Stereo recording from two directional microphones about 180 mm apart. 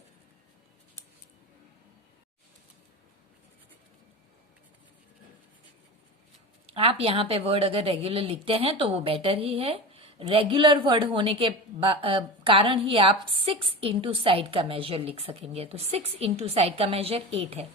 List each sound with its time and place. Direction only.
6.7 s speech: 35° right (ahead or behind)